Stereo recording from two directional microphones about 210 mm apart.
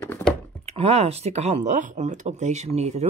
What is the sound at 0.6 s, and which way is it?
Speech, 30° right (ahead or behind).